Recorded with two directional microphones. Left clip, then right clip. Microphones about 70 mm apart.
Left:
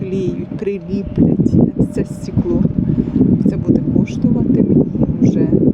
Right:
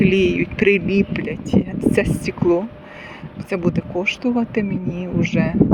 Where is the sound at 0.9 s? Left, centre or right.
Centre.